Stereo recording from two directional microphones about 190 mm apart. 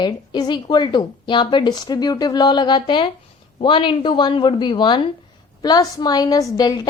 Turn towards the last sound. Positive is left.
turn(degrees=20)  # may be behind; listen again after turning